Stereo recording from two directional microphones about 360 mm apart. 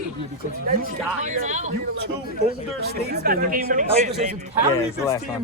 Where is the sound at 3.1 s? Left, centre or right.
Right.